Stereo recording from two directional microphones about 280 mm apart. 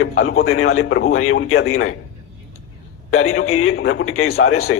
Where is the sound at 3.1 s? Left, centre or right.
Left.